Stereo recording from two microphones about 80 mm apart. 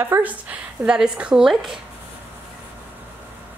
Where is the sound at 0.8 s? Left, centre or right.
Centre.